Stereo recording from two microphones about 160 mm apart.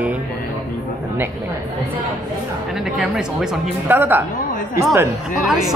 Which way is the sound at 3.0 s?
5° right (ahead or behind).